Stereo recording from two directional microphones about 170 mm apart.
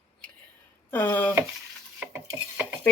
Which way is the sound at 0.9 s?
10° left (ahead or behind).